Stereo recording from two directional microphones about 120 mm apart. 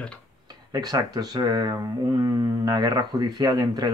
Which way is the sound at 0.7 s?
35° right (ahead or behind).